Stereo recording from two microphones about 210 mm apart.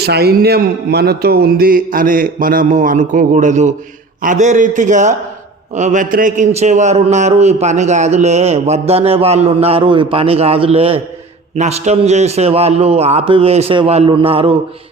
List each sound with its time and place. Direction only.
0.0 s a man's voice: 50° right (ahead or behind); by 14.5 s 25° right (ahead or behind)